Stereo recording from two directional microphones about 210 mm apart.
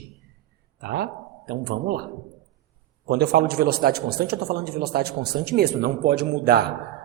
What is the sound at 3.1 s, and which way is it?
A man's voice, 50° right (ahead or behind).